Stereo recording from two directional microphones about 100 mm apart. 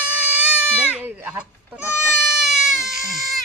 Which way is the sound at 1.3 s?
10° right (ahead or behind).